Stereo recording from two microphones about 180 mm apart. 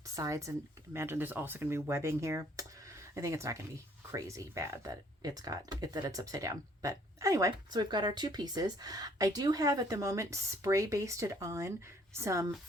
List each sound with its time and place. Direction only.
0.1 s speech: 20° right (ahead or behind)